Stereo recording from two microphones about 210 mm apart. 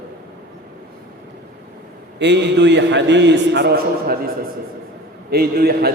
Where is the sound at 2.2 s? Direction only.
55° right (ahead or behind).